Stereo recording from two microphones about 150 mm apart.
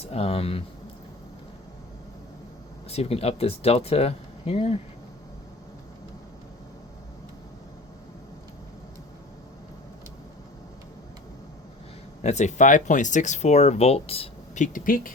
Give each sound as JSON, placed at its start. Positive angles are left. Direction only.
{"t": 0.0, "sound": "speech", "side_deg": 40}
{"t": 2.9, "sound": "speech", "side_deg": 40}
{"t": 12.2, "sound": "speech", "side_deg": 50}
{"t": 14.5, "sound": "speech", "side_deg": 60}